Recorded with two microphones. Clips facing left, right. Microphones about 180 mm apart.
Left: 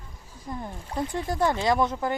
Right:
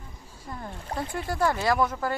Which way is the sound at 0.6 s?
20° left (ahead or behind).